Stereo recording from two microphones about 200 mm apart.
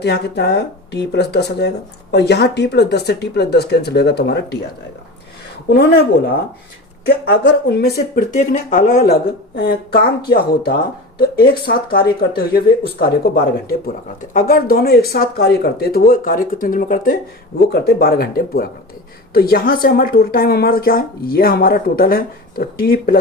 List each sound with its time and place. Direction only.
0.0 s speech: 55° left (ahead or behind)
5.6 s speech: 60° left (ahead or behind)
7.3 s a woman's voice: 55° left (ahead or behind)
8.4 s a woman's voice: 40° left (ahead or behind)